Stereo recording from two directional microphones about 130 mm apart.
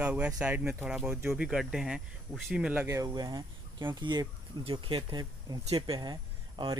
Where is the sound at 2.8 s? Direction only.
25° right (ahead or behind).